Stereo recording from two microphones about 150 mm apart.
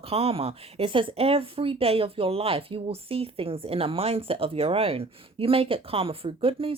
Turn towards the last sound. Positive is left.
turn(degrees=-40)  # may be behind; listen again after turning